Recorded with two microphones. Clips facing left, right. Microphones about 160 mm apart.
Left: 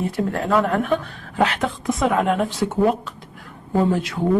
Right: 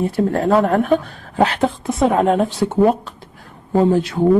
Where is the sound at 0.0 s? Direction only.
35° right (ahead or behind).